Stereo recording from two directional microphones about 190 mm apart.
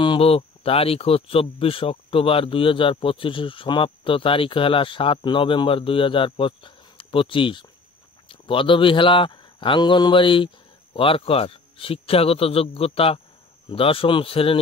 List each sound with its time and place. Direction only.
0.0 s speech: 30° left (ahead or behind)